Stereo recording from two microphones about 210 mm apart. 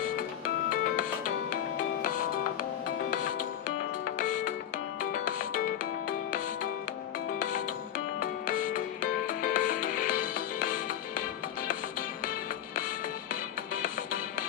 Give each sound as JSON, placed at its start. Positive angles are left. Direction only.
{"t": 2.0, "sound": "music", "side_deg": 40}
{"t": 4.2, "sound": "music", "side_deg": 40}
{"t": 8.2, "sound": "music", "side_deg": 40}